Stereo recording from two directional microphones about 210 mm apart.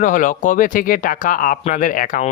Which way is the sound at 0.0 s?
40° left (ahead or behind).